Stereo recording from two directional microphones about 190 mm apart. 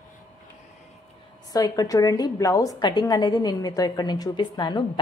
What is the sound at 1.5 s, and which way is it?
A woman's voice, 20° left (ahead or behind).